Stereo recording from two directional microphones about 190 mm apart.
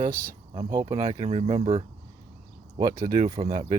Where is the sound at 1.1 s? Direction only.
35° right (ahead or behind).